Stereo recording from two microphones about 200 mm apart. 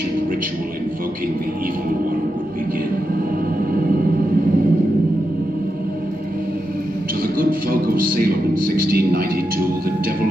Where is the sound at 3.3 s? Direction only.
45° right (ahead or behind).